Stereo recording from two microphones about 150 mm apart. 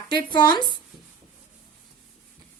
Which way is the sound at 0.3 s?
30° left (ahead or behind).